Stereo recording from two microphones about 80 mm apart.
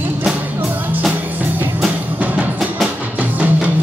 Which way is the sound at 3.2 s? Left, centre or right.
Centre.